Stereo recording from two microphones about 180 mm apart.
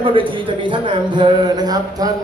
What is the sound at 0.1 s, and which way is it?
A man's voice, 30° right (ahead or behind).